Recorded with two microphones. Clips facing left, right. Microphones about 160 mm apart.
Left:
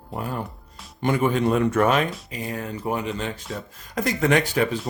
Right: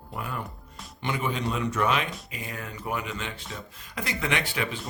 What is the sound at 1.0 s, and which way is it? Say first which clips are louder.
Speech: left 8 dB; 50° left (ahead or behind).